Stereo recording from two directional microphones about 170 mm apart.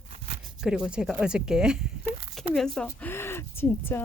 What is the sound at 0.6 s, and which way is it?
Speech, 5° right (ahead or behind).